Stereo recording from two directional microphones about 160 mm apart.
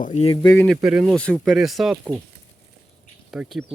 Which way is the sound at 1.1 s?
5° left (ahead or behind).